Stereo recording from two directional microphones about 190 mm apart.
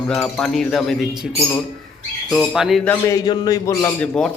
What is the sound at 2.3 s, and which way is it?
Speech, centre (ahead or behind).